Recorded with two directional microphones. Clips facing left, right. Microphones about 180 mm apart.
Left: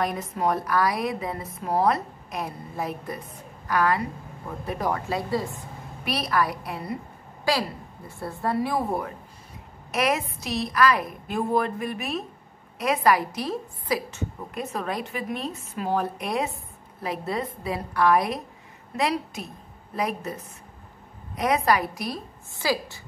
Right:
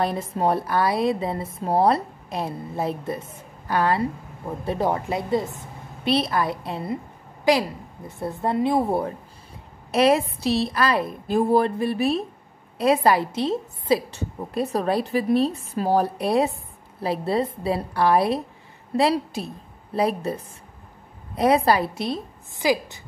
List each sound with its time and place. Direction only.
0.0 s a woman's voice: 30° right (ahead or behind)
21.4 s a woman's voice: 30° right (ahead or behind)